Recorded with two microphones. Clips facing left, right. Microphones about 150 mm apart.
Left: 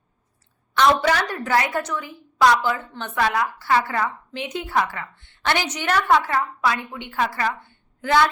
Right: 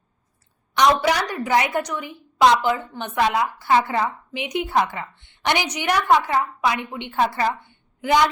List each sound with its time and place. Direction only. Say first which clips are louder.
0.7 s a woman's voice: even; 15° right (ahead or behind)